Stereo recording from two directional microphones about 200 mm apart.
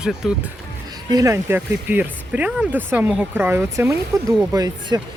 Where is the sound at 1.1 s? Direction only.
15° right (ahead or behind).